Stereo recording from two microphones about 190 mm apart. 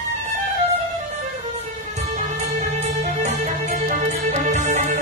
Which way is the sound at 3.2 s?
40° right (ahead or behind).